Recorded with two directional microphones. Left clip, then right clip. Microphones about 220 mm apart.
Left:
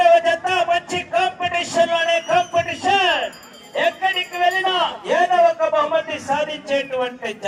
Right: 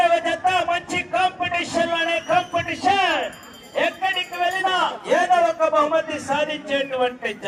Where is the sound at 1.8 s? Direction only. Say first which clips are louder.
Left 6 dB; 20° left (ahead or behind).